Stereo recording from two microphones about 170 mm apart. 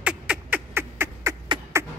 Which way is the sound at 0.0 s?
5° right (ahead or behind).